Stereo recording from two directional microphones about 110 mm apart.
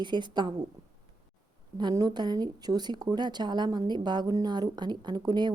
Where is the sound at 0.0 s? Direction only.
45° right (ahead or behind).